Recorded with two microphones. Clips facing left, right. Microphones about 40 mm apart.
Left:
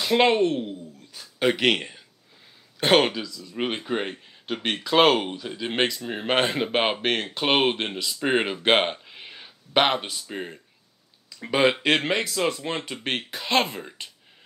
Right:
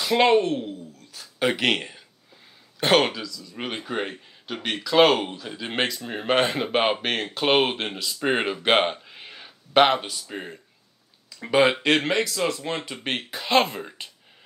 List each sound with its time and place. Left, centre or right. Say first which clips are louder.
0.1 s speech: right 1 dB; centre
0.4 s a sound: left 1 dB; centre
1.2 s speech: left 1 dB; centre
5.4 s speech: left 2 dB; centre
6.2 s speech: right 1 dB; centre
8.6 s a sound: right 2 dB; centre
10.2 s speech: left 1 dB; centre
11.4 s speech: right 2 dB; centre
12.7 s speech: even; centre